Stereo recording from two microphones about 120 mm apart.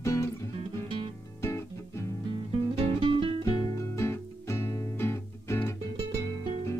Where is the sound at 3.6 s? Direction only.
25° left (ahead or behind).